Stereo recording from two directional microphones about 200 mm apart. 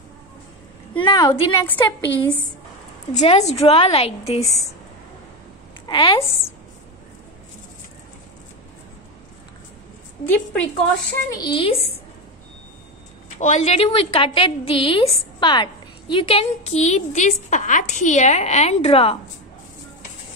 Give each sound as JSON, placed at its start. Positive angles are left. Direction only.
{"t": 1.0, "sound": "a woman's voice", "side_deg": 20}
{"t": 3.1, "sound": "a woman's voice", "side_deg": 35}
{"t": 5.9, "sound": "a woman's voice", "side_deg": 25}
{"t": 10.2, "sound": "a woman's voice", "side_deg": 5}
{"t": 11.2, "sound": "a woman's voice", "side_deg": 20}
{"t": 13.4, "sound": "a woman's voice", "side_deg": 35}